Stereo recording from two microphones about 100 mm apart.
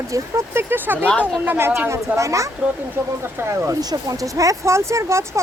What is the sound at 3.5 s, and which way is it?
Speech, 30° right (ahead or behind).